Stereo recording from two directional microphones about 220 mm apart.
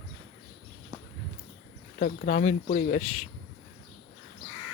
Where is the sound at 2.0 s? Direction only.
35° left (ahead or behind).